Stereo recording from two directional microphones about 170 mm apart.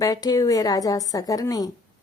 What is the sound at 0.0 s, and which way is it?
A woman's voice, 20° left (ahead or behind).